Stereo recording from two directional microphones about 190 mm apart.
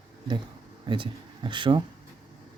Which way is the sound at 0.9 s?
25° right (ahead or behind).